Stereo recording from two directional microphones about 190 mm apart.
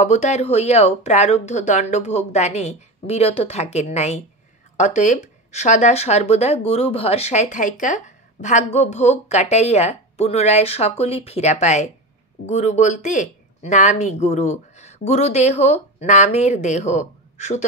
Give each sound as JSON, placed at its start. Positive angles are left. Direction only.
{"t": 0.0, "sound": "speech", "side_deg": 35}